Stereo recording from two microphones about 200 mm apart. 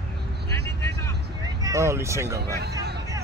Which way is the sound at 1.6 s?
15° right (ahead or behind).